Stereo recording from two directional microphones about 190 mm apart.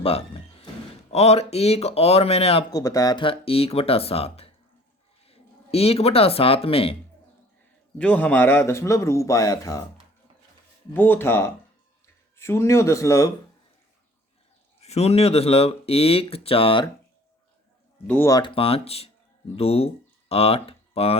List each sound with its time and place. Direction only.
0.0 s a sound: 30° left (ahead or behind)
1.1 s speech: 35° left (ahead or behind)
2.7 s speech: 20° left (ahead or behind)
7.9 s a man's voice: 5° left (ahead or behind)
10.9 s a man's voice: 10° left (ahead or behind)
14.8 s speech: 35° left (ahead or behind)
18.0 s speech: 10° left (ahead or behind); by 21.2 s 30° left (ahead or behind)